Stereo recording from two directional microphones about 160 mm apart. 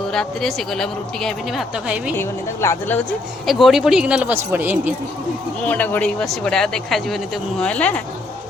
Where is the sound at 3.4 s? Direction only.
Centre (ahead or behind).